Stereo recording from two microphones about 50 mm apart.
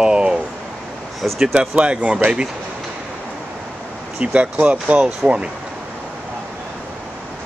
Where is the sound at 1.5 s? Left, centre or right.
Right.